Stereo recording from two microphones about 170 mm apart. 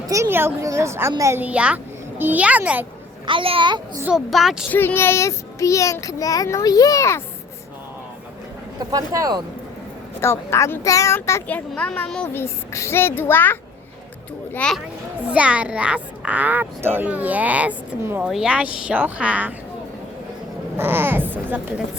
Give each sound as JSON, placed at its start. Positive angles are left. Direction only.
{"t": 0.1, "sound": "a child's voice", "side_deg": -15}
{"t": 3.2, "sound": "speech", "side_deg": -30}
{"t": 4.0, "sound": "speech", "side_deg": 0}
{"t": 4.7, "sound": "speech", "side_deg": 10}
{"t": 8.8, "sound": "speech", "side_deg": -20}
{"t": 10.2, "sound": "speech", "side_deg": 15}
{"t": 15.3, "sound": "a child's voice", "side_deg": -5}
{"t": 20.7, "sound": "speech", "side_deg": -15}